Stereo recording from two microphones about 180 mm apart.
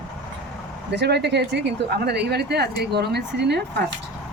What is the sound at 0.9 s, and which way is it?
A woman's voice, 70° right (ahead or behind).